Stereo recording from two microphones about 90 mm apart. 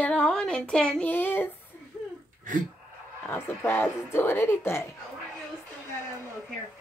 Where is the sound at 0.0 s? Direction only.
15° left (ahead or behind).